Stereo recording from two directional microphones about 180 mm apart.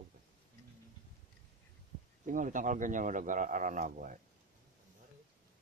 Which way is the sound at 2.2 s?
45° right (ahead or behind).